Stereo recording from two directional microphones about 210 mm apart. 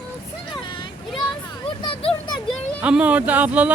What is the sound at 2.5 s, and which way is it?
Speech, 5° right (ahead or behind).